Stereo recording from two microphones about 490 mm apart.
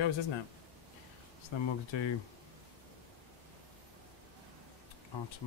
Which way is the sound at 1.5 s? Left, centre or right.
Left.